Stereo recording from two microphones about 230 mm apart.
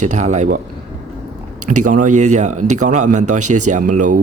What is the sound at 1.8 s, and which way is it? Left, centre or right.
Speech, right.